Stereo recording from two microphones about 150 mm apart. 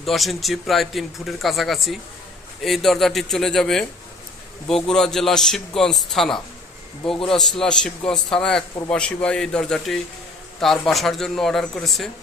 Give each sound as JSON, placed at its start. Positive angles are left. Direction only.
{"t": 0.0, "sound": "speech", "side_deg": 0}